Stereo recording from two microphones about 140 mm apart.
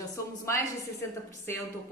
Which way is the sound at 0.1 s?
20° left (ahead or behind).